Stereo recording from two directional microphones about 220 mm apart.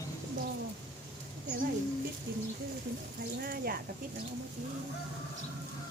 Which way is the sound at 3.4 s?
40° right (ahead or behind).